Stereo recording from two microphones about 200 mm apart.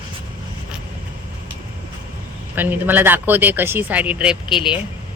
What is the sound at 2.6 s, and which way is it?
A woman's voice, 10° right (ahead or behind).